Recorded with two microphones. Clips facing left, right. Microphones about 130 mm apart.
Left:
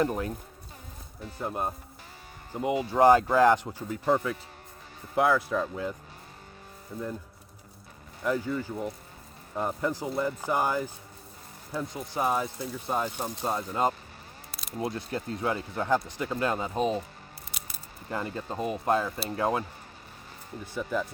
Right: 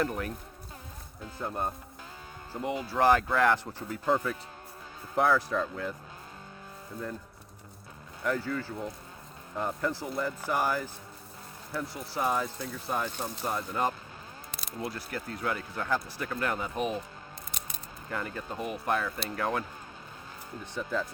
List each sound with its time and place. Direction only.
0.0 s speech: 20° left (ahead or behind)
1.4 s speech: 15° left (ahead or behind)
8.2 s speech: 15° left (ahead or behind)
18.1 s speech: 20° left (ahead or behind)
20.7 s speech: 10° left (ahead or behind)